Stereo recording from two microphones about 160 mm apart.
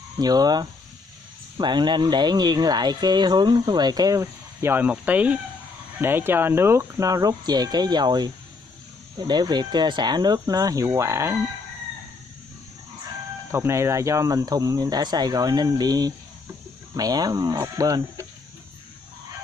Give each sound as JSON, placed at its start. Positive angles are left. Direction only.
{"t": 0.2, "sound": "speech", "side_deg": -25}
{"t": 9.3, "sound": "speech", "side_deg": -25}
{"t": 13.5, "sound": "speech", "side_deg": -15}